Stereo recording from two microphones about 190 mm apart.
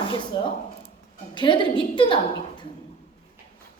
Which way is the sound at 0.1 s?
25° left (ahead or behind).